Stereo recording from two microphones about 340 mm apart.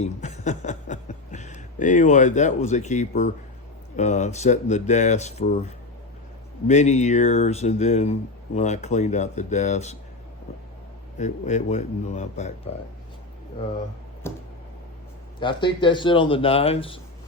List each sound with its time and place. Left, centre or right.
0.0 s a man's voice: centre
11.2 s speech: left
14.2 s speech: centre